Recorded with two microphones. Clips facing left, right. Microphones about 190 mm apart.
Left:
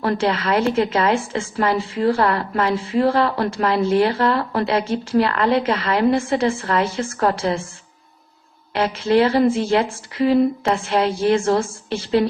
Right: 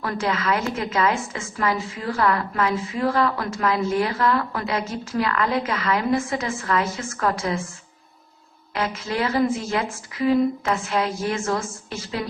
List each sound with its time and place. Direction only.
0.0 s a woman's voice: 30° left (ahead or behind)
8.7 s a woman's voice: 30° left (ahead or behind)